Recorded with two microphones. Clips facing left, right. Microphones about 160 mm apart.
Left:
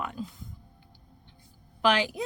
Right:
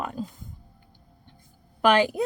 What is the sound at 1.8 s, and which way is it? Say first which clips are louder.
Speech: right 5 dB; 55° right (ahead or behind).